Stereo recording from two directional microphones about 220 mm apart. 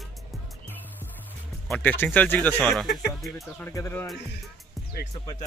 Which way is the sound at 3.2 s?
5° left (ahead or behind).